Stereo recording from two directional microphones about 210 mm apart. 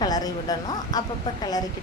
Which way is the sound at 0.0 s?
20° left (ahead or behind).